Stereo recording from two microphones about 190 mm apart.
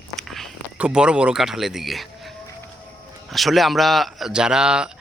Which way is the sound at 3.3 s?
Centre (ahead or behind).